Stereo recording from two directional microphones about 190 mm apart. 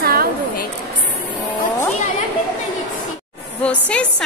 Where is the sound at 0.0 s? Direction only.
50° right (ahead or behind).